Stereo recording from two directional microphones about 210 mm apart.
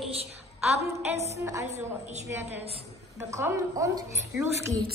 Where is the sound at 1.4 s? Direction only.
15° right (ahead or behind).